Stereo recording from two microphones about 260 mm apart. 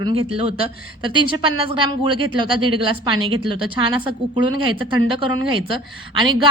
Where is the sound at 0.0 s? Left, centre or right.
Right.